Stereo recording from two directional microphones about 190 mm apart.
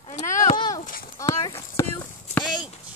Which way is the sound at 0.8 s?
45° left (ahead or behind).